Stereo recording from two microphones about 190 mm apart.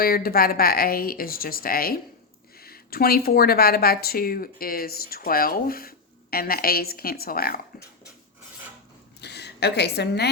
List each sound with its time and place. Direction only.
0.0 s speech: 50° left (ahead or behind)
9.2 s a woman's voice: 60° left (ahead or behind)